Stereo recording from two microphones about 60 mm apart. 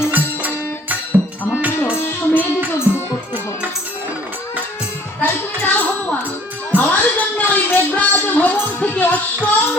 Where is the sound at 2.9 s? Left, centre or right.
Right.